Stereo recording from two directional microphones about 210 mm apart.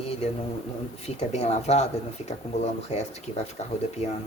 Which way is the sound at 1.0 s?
30° left (ahead or behind).